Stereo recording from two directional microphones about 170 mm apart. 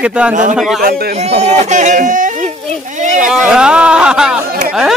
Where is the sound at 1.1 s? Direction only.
40° right (ahead or behind).